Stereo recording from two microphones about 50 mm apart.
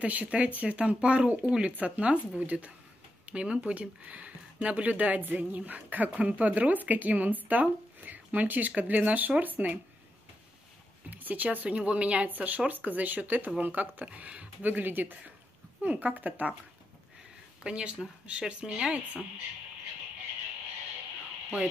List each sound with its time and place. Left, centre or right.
0.0 s speech: right
11.1 s speech: right
14.7 s speech: right
17.6 s speech: right